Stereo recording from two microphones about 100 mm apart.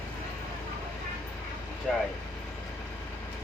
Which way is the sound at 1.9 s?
5° left (ahead or behind).